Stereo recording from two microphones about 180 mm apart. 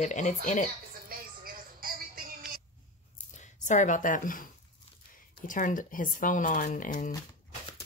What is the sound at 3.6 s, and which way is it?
Speech, 45° left (ahead or behind).